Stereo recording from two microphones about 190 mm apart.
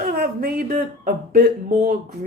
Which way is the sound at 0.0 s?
50° right (ahead or behind).